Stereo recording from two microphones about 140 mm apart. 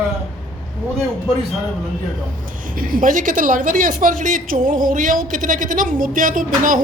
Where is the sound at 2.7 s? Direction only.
70° right (ahead or behind).